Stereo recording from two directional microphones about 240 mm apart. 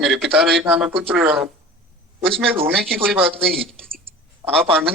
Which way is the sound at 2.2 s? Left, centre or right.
Right.